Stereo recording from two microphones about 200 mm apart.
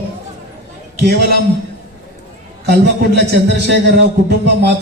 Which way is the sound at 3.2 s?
60° right (ahead or behind).